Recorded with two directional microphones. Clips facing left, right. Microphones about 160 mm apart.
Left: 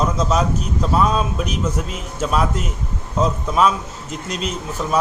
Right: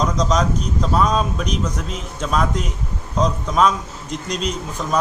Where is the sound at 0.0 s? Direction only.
5° left (ahead or behind).